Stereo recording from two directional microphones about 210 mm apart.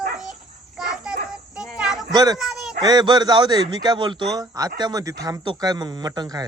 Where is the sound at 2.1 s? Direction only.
20° right (ahead or behind).